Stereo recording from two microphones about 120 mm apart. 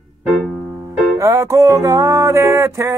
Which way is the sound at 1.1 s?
25° right (ahead or behind).